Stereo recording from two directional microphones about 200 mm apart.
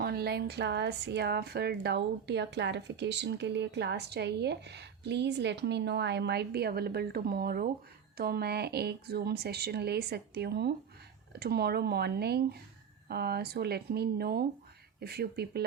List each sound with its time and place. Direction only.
0.0 s a woman's voice: 50° right (ahead or behind)